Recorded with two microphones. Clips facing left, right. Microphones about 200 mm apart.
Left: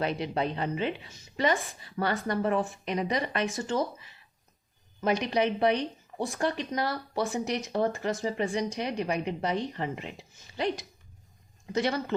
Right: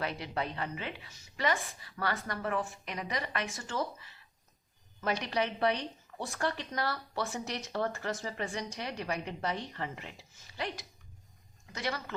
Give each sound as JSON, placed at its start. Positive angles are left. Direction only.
{"t": 0.0, "sound": "speech", "side_deg": 20}